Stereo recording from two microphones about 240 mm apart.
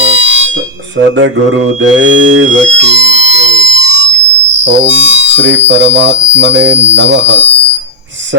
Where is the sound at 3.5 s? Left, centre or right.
Right.